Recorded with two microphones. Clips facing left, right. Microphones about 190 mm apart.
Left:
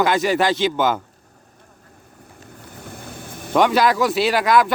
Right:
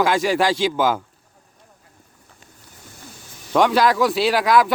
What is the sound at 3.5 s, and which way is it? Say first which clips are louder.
Speech: even; centre (ahead or behind).